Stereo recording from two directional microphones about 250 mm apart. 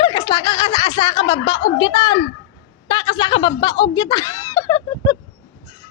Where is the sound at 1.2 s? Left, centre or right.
Left.